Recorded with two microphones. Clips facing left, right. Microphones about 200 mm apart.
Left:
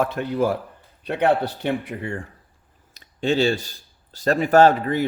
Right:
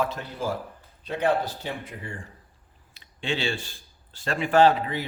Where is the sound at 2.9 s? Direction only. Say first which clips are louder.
Left 8 dB; 40° left (ahead or behind).